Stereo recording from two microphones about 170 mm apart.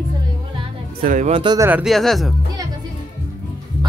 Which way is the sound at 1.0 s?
50° right (ahead or behind).